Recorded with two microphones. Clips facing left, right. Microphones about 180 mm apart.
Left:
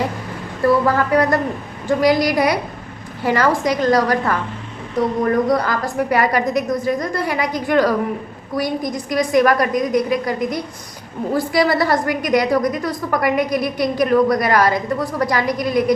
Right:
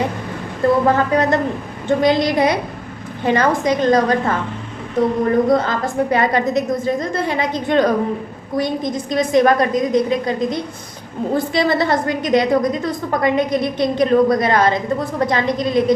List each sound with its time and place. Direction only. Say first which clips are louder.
0.6 s a woman's voice: right 1 dB; 20° right (ahead or behind)
5.0 s speech: right 2 dB; 50° right (ahead or behind)
5.5 s a woman's voice: right 2 dB; 25° right (ahead or behind)